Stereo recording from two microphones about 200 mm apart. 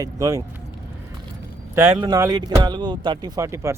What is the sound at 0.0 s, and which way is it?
Speech, 15° right (ahead or behind).